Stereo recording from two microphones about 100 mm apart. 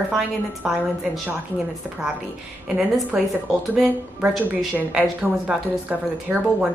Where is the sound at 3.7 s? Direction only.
10° right (ahead or behind).